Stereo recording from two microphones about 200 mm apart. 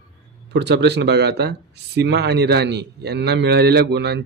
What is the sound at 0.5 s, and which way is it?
Speech, 60° right (ahead or behind).